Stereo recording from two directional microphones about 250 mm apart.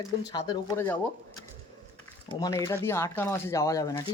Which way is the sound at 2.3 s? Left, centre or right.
Centre.